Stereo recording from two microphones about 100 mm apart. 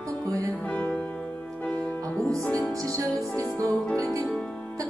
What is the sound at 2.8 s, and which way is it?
Music, 30° right (ahead or behind).